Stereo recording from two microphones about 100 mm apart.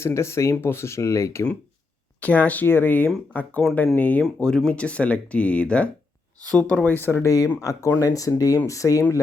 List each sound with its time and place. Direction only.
0.0 s speech: 25° left (ahead or behind)
2.2 s speech: 15° left (ahead or behind); by 9.0 s 30° left (ahead or behind)